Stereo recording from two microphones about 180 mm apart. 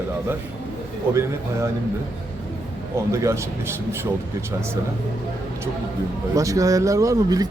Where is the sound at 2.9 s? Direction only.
15° right (ahead or behind).